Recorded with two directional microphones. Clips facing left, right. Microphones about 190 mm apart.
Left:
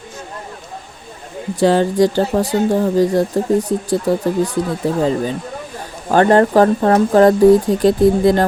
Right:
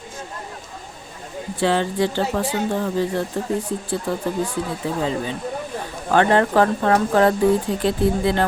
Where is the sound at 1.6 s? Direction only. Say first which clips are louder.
Left 7 dB; 40° left (ahead or behind).